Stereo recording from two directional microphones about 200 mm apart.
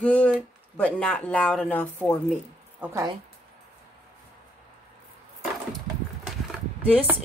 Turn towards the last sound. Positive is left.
turn(degrees=-5)  # may be behind; listen again after turning